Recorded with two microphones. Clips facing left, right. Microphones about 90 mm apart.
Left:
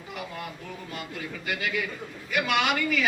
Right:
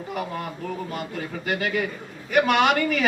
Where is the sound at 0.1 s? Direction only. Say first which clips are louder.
Right 6 dB; 40° right (ahead or behind).